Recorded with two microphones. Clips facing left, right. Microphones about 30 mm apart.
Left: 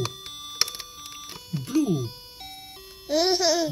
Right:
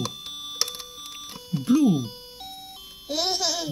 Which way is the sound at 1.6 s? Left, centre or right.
Right.